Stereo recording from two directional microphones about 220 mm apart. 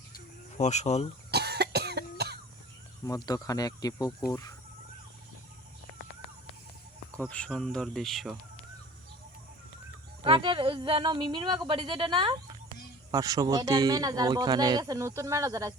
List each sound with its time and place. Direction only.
0.1 s a sound: 30° left (ahead or behind)
1.3 s cough: 45° right (ahead or behind)
3.1 s speech: 15° left (ahead or behind)
7.2 s speech: 5° left (ahead or behind)
10.2 s speech: 20° right (ahead or behind)